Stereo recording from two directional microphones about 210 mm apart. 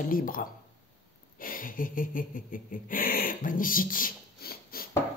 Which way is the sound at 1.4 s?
40° left (ahead or behind).